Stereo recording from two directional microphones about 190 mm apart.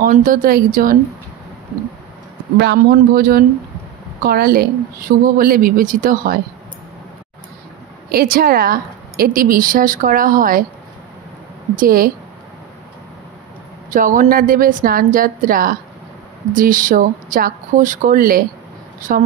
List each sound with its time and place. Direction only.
0.0 s a woman's voice: 45° right (ahead or behind)
2.6 s a woman's voice: 55° right (ahead or behind)
8.1 s a woman's voice: 50° right (ahead or behind)
11.7 s a woman's voice: 50° right (ahead or behind)
13.8 s a woman's voice: 45° right (ahead or behind)